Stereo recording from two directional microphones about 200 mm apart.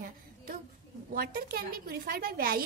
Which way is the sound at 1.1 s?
50° right (ahead or behind).